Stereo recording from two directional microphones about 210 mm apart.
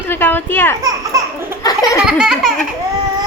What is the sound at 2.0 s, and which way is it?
Baby laughter, 5° right (ahead or behind).